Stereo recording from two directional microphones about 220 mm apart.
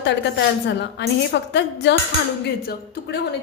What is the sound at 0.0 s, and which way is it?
Speech, 50° left (ahead or behind).